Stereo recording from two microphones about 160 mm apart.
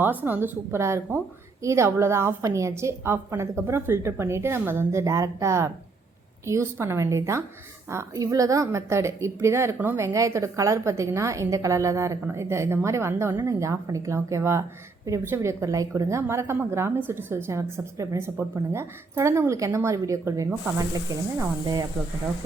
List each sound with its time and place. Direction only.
0.0 s speech: 10° right (ahead or behind)